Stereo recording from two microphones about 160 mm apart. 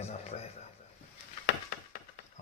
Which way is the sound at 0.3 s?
45° left (ahead or behind).